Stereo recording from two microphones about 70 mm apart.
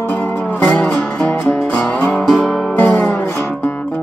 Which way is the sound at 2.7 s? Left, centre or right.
Left.